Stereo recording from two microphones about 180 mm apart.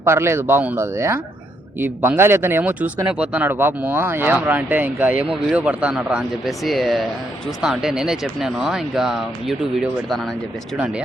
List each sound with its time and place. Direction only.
0.0 s speech: 15° right (ahead or behind)